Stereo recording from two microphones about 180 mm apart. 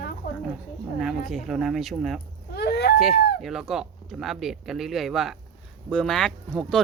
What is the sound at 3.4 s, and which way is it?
Speech, centre (ahead or behind).